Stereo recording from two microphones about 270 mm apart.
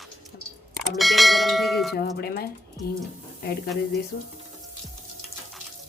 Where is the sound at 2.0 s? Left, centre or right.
Left.